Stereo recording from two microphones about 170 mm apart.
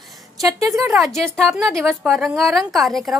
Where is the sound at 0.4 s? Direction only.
20° right (ahead or behind).